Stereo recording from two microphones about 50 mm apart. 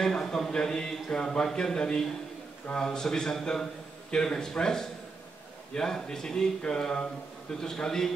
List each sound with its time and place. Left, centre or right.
0.0 s speech: centre